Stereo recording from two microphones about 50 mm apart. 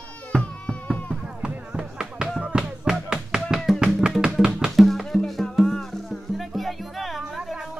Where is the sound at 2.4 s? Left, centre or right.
Centre.